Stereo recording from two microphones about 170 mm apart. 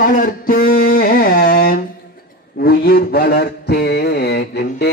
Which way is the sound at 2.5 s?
65° left (ahead or behind).